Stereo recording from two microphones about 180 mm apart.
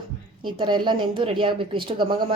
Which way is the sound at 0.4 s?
25° right (ahead or behind).